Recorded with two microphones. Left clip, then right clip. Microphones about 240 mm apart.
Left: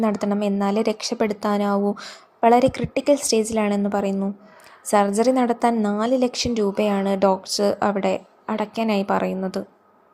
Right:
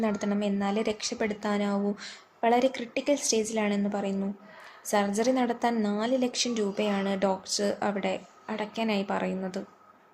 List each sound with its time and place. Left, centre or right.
0.0 s a woman's voice: left